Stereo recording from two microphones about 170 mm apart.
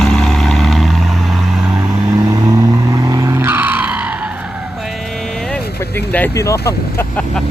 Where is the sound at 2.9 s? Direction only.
20° right (ahead or behind).